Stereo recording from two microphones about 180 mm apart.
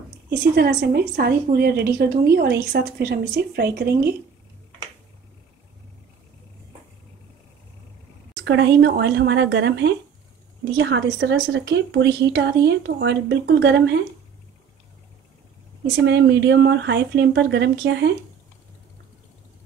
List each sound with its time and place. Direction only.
0.6 s a woman's voice: 60° right (ahead or behind)
8.5 s speech: 70° right (ahead or behind)
16.0 s speech: 75° right (ahead or behind)